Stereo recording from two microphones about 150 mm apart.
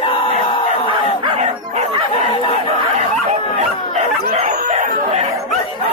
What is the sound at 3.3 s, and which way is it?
Bow-wow, 50° right (ahead or behind).